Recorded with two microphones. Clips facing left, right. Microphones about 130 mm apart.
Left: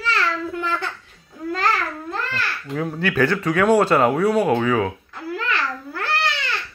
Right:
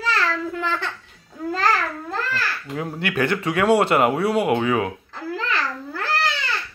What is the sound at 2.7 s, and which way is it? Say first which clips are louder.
Speech: left 4 dB; 25° right (ahead or behind).